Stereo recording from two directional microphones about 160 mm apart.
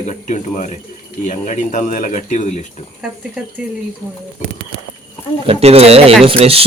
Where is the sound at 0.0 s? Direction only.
45° left (ahead or behind).